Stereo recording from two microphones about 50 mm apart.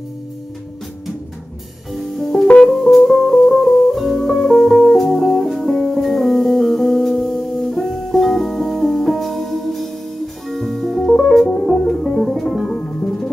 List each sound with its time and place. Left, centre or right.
1.9 s music: centre
11.4 s music: centre
11.7 s music: centre